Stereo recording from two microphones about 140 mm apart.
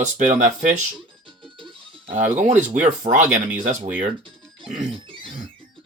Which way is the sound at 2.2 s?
60° right (ahead or behind).